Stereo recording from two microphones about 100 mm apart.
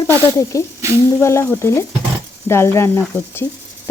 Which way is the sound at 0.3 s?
35° left (ahead or behind).